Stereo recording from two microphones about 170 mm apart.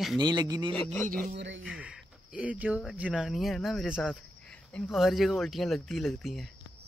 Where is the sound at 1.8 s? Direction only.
5° right (ahead or behind).